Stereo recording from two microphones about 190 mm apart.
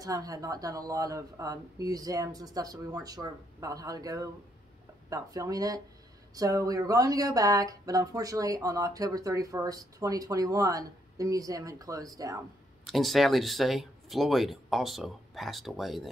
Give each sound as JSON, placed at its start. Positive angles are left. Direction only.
{"t": 0.0, "sound": "speech", "side_deg": -20}
{"t": 12.8, "sound": "speech", "side_deg": 0}